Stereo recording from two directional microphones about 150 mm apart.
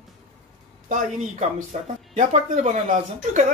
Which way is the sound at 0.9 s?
55° right (ahead or behind).